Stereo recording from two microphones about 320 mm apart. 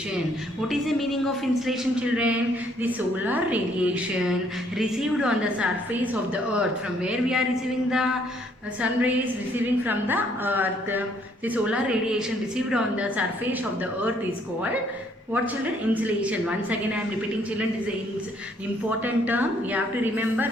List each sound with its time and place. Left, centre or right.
0.7 s a woman's voice: centre
15.9 s a woman's voice: centre
18.9 s a woman's voice: centre